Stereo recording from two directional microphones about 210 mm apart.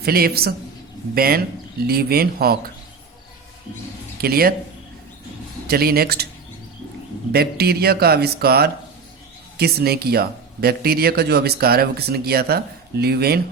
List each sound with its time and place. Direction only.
0.0 s speech: 45° right (ahead or behind)
4.2 s speech: 45° right (ahead or behind)
5.6 s speech: 45° right (ahead or behind)
7.3 s speech: 50° right (ahead or behind)